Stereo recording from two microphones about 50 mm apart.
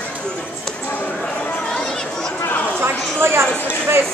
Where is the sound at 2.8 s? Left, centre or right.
Right.